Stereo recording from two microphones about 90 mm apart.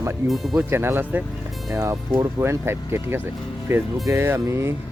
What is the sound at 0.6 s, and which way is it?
Speech, 25° right (ahead or behind).